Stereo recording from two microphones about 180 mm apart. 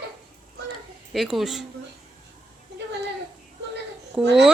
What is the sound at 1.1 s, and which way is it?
Speech, centre (ahead or behind).